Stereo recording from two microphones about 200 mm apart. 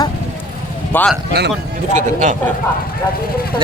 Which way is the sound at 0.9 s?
5° left (ahead or behind).